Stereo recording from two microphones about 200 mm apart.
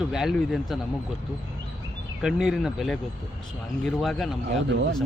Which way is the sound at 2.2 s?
Centre (ahead or behind).